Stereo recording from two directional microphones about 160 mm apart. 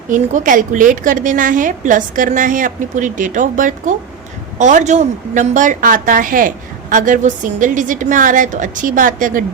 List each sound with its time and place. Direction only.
0.1 s a woman's voice: 55° right (ahead or behind)